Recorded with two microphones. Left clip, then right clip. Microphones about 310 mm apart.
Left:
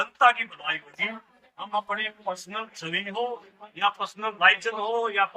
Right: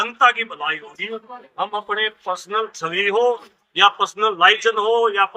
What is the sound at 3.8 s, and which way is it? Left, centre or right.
Speech, centre.